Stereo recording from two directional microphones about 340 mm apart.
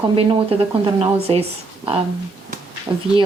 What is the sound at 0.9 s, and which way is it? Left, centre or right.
Speech, centre.